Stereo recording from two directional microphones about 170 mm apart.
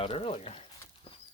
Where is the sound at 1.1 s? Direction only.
35° left (ahead or behind).